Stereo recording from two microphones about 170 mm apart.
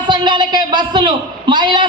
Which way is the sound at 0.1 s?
25° right (ahead or behind).